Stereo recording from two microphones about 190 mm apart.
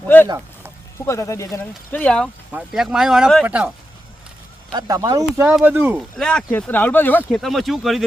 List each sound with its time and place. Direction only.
0.1 s speech: 10° left (ahead or behind); by 3.7 s 5° right (ahead or behind)
4.7 s speech: 20° right (ahead or behind)
6.1 s speech: 5° left (ahead or behind)